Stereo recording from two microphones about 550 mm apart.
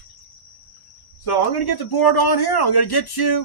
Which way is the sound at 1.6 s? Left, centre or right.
Left.